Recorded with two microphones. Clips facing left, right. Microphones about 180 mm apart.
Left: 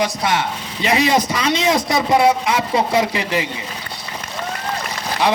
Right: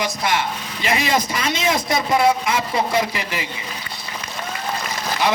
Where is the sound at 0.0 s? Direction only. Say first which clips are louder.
Left 3 dB; 30° left (ahead or behind).